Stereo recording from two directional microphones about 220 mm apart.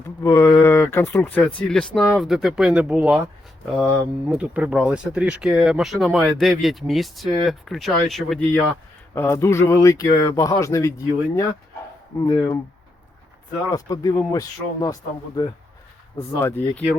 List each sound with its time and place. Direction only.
0.2 s speech: 15° left (ahead or behind); by 3.2 s 5° right (ahead or behind)
4.3 s speech: 5° right (ahead or behind); by 12.5 s 15° left (ahead or behind)
13.7 s speech: 15° left (ahead or behind)